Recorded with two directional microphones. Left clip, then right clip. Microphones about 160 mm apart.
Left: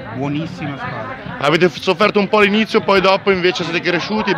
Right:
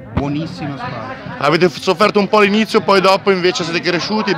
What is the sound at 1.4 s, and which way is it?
A man's voice, centre (ahead or behind).